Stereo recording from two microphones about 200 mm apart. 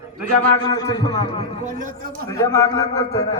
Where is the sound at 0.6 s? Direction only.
20° left (ahead or behind).